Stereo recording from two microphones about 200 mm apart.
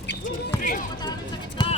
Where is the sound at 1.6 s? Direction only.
25° left (ahead or behind).